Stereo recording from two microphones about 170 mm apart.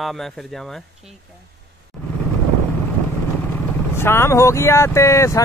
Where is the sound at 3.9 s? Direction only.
15° left (ahead or behind).